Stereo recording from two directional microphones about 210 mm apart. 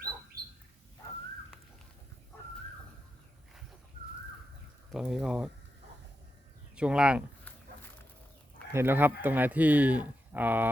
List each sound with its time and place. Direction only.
0.3 s bird: 45° right (ahead or behind)
4.9 s speech: centre (ahead or behind)
6.7 s speech: 5° right (ahead or behind)
8.7 s speech: 10° right (ahead or behind)